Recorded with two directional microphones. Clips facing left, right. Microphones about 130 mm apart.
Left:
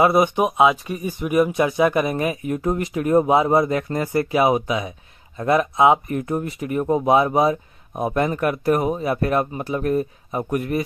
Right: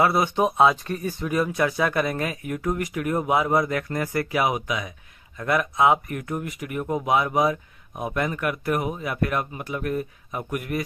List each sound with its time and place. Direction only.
0.0 s speech: 20° left (ahead or behind)